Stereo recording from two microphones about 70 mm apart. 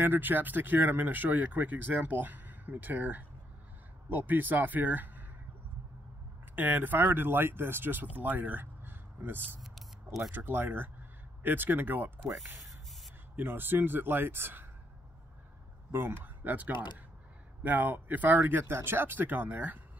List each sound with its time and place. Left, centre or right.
0.0 s speech: right
6.5 s speech: right
12.3 s speech: centre
13.4 s speech: right
15.9 s speech: right
16.7 s speech: left
17.6 s speech: right
18.6 s speech: right